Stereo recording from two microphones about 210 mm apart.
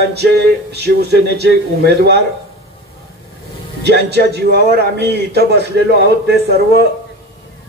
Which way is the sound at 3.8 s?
50° right (ahead or behind).